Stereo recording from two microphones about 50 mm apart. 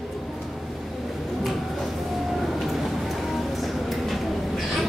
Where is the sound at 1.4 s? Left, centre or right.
Centre.